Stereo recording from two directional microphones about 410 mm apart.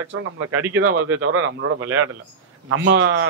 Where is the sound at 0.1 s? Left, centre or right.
Right.